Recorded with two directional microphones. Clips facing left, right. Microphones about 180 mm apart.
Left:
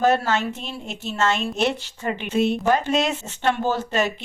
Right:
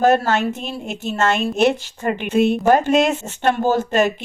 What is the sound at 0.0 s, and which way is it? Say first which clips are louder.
A woman's voice: right 4 dB; 50° right (ahead or behind).